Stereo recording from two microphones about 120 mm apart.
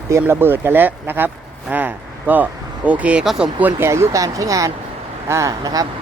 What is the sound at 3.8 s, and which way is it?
Speech, 20° right (ahead or behind).